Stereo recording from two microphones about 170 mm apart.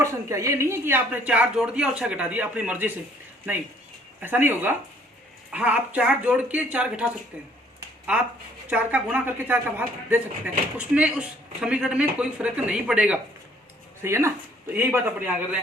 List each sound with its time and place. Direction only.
0.0 s speech: 15° right (ahead or behind)
4.2 s speech: 10° right (ahead or behind)
8.7 s speech: 10° right (ahead or behind)